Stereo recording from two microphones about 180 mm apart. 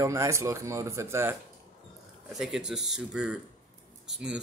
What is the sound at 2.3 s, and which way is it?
Speech, centre (ahead or behind).